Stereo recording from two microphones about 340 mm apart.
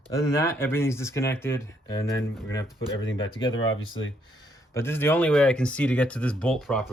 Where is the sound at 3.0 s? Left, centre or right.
Left.